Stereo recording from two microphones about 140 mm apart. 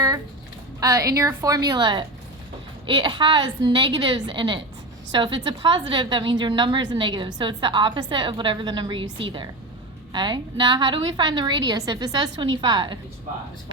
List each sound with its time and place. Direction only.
0.8 s a woman's voice: 25° right (ahead or behind)